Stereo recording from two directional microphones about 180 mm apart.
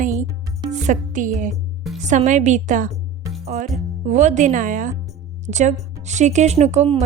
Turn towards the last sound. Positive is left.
turn(degrees=-40)  # may be behind; listen again after turning